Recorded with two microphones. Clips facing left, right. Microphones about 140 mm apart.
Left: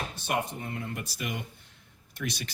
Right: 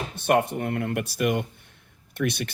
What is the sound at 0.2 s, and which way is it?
Speech, 60° right (ahead or behind).